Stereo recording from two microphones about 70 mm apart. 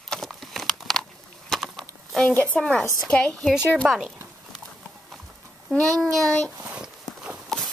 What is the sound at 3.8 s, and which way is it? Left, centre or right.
Speech, centre.